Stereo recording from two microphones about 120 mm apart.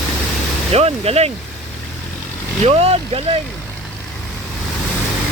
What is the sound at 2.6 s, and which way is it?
Speech, 60° right (ahead or behind).